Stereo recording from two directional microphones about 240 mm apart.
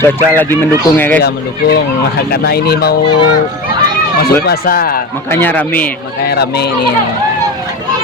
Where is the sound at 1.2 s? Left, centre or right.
Left.